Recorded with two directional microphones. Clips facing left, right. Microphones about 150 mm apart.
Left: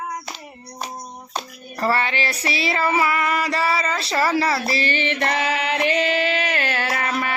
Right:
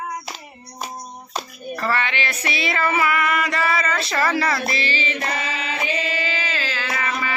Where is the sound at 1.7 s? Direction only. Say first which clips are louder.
Left 2 dB; 40° left (ahead or behind).